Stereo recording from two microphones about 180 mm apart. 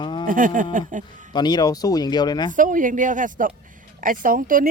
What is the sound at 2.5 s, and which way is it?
Speech, 45° right (ahead or behind).